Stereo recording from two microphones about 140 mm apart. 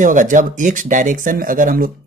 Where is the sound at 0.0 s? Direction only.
65° right (ahead or behind).